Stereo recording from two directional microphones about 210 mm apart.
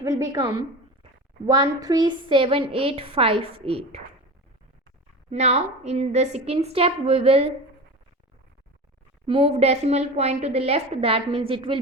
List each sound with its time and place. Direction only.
0.0 s a woman's voice: 15° right (ahead or behind)
5.3 s a woman's voice: 30° right (ahead or behind)
9.2 s a woman's voice: 25° right (ahead or behind)